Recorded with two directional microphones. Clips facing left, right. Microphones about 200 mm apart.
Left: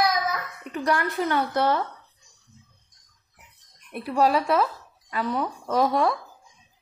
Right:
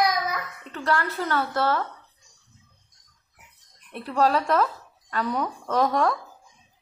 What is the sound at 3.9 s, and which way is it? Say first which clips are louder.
Speech: left 1 dB; 10° left (ahead or behind).